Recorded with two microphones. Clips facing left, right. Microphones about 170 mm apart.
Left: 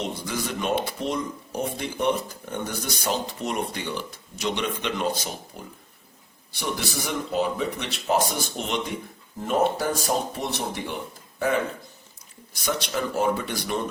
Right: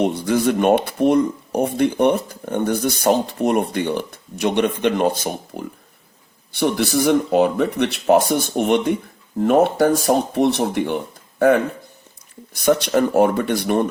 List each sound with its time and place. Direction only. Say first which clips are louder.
0.0 s speech: right 12 dB; 60° right (ahead or behind)